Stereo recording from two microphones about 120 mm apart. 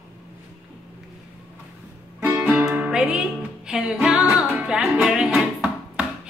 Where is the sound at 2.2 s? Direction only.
20° right (ahead or behind).